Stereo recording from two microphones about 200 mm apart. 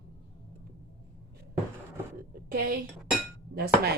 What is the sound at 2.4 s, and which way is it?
A woman's voice, 50° right (ahead or behind).